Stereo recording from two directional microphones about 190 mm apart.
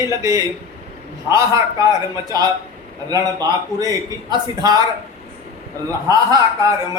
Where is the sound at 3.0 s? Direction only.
20° right (ahead or behind).